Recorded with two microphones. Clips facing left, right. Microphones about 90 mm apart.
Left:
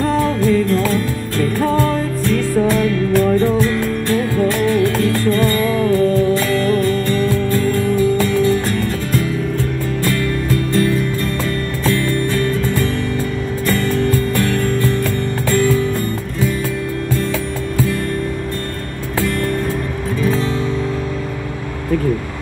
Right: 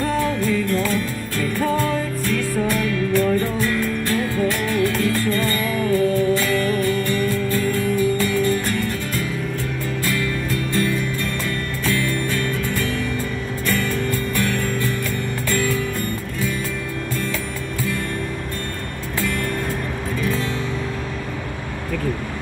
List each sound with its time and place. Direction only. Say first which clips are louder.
0.0 s music: left 5 dB; 35° left (ahead or behind)
10.7 s music: left 5 dB; 35° left (ahead or behind)
14.3 s music: left 5 dB; 35° left (ahead or behind)
20.2 s music: left 6 dB; 35° left (ahead or behind)